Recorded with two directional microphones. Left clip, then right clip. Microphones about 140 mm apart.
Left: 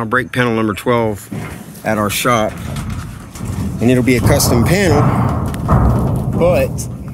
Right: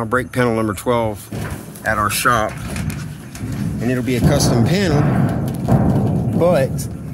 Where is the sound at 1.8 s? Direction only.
30° left (ahead or behind).